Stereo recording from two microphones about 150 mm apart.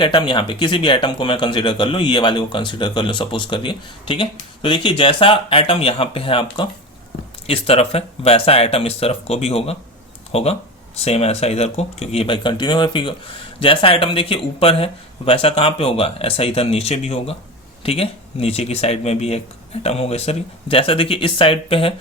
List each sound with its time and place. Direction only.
0.0 s speech: 30° left (ahead or behind)